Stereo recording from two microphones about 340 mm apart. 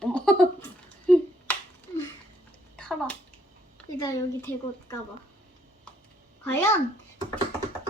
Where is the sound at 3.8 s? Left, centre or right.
Centre.